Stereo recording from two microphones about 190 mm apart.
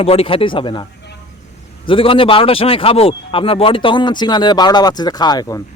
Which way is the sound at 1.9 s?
30° left (ahead or behind).